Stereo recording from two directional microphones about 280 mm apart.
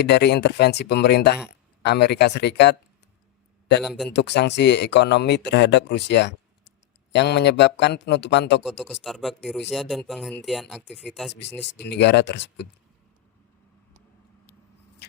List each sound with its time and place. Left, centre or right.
0.0 s speech: left
3.8 s speech: centre
4.1 s speech: left
8.6 s speech: centre
11.6 s speech: left